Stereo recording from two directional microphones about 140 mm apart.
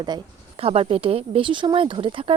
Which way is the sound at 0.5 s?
45° right (ahead or behind).